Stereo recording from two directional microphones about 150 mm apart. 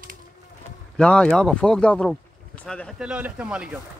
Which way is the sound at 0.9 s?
5° left (ahead or behind).